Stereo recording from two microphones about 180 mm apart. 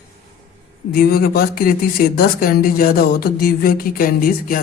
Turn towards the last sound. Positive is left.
turn(degrees=50)  # may be behind; listen again after turning